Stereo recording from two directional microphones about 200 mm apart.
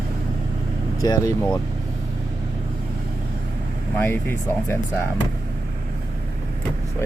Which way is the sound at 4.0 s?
10° left (ahead or behind).